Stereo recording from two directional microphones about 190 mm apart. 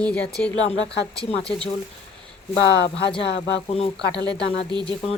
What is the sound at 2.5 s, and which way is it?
Speech, 65° left (ahead or behind).